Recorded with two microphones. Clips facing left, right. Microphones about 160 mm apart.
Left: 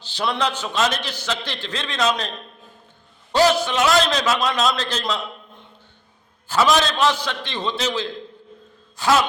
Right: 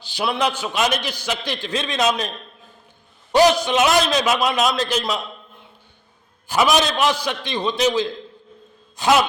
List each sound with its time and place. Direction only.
0.0 s a man's voice: 10° right (ahead or behind)
3.3 s a man's voice: 15° right (ahead or behind)
6.5 s a man's voice: 15° right (ahead or behind)
9.0 s gasp: 20° right (ahead or behind)